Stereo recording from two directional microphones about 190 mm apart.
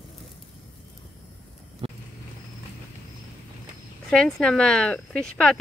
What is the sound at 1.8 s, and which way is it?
Vehicle, 30° right (ahead or behind).